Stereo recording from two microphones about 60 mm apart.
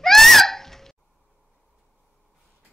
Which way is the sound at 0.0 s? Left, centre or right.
Centre.